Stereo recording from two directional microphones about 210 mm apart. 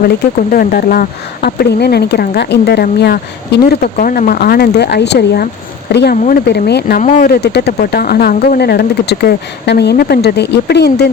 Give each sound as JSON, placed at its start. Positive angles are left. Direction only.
{"t": 0.5, "sound": "speech", "side_deg": 45}